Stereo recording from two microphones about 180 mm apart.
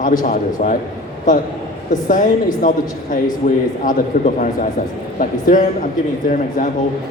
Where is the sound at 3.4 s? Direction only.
50° left (ahead or behind).